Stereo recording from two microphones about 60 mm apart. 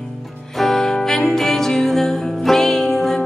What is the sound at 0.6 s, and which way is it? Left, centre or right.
Music, centre.